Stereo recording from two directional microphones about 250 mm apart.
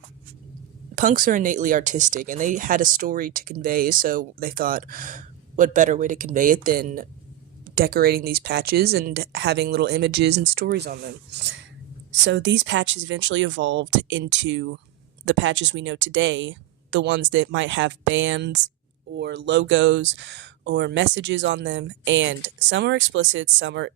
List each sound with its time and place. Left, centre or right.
0.9 s speech: right